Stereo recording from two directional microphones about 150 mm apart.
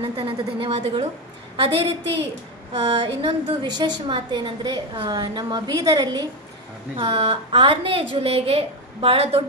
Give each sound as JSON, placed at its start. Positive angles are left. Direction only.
{"t": 0.0, "sound": "a woman's voice", "side_deg": -35}
{"t": 7.0, "sound": "a woman's voice", "side_deg": -40}